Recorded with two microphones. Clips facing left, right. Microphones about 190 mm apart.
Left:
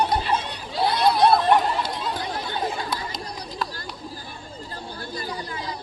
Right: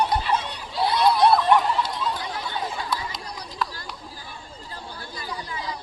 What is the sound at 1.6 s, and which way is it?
Chatter, 45° left (ahead or behind).